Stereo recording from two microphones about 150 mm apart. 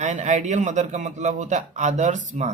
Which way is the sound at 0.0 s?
50° right (ahead or behind).